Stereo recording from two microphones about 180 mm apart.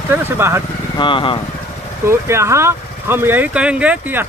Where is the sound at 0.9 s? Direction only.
25° left (ahead or behind).